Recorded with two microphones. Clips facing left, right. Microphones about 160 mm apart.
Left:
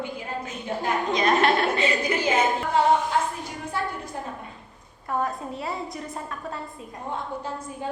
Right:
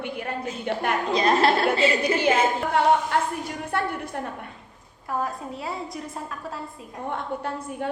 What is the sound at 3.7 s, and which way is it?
Speech, 65° right (ahead or behind).